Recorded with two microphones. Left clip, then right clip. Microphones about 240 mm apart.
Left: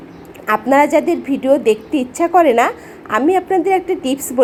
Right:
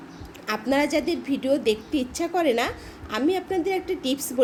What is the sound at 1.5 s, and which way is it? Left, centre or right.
Speech, centre.